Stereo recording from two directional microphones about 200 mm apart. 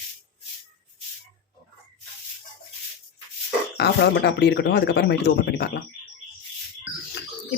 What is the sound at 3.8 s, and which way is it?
Speech, 55° left (ahead or behind).